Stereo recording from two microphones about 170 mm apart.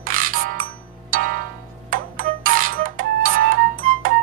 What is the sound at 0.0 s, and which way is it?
Music, 55° right (ahead or behind).